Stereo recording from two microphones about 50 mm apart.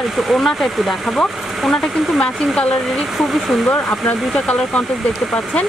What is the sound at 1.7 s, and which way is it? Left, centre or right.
Speech, centre.